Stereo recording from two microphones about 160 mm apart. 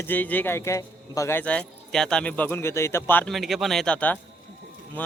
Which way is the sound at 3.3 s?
Centre (ahead or behind).